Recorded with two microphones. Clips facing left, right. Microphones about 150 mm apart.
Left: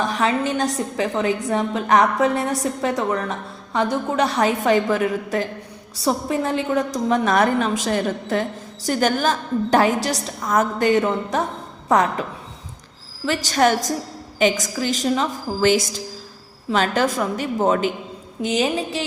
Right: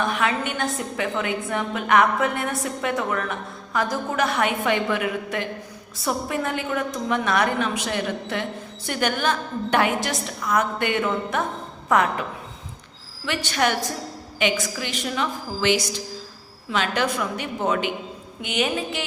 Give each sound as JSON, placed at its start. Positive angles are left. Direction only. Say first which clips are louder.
{"t": 0.0, "sound": "a woman's voice", "louder": "left 3 dB", "side_deg": 35}
{"t": 7.1, "sound": "a woman's voice", "louder": "left 4 dB", "side_deg": 40}
{"t": 13.2, "sound": "a woman's voice", "louder": "left 5 dB", "side_deg": 40}